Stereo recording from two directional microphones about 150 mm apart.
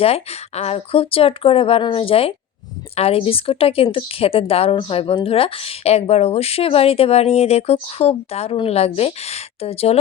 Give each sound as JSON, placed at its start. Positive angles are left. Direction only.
{"t": 0.0, "sound": "speech", "side_deg": 45}